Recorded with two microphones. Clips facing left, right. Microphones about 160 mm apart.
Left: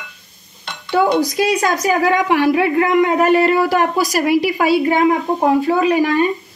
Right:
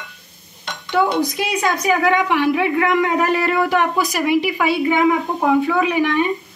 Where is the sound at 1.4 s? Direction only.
40° left (ahead or behind).